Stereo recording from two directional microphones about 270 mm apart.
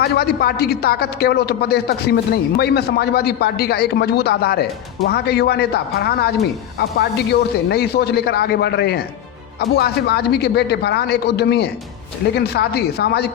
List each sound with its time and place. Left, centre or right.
0.0 s a man's voice: left